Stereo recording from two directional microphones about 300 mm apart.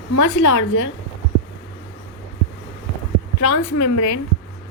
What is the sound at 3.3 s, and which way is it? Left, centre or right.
Speech, left.